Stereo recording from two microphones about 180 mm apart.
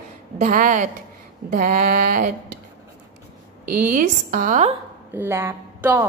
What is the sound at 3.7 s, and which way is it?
Speech, 50° right (ahead or behind).